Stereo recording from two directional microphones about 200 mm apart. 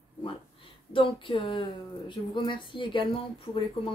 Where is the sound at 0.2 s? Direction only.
25° left (ahead or behind).